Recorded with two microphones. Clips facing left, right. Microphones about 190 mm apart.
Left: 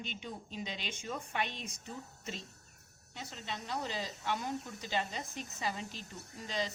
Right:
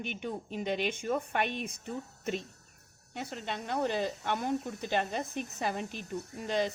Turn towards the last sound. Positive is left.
turn(degrees=-55)  # may be behind; listen again after turning